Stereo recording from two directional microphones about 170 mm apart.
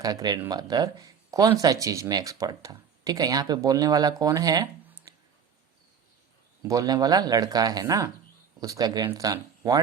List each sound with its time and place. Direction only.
0.0 s speech: 20° right (ahead or behind)
5.1 s a sound: 20° right (ahead or behind)
6.6 s speech: 20° right (ahead or behind)